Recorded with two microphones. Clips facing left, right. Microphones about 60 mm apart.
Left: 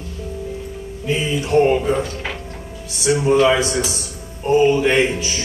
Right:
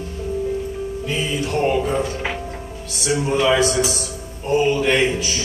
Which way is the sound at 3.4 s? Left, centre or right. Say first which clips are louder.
Even; left.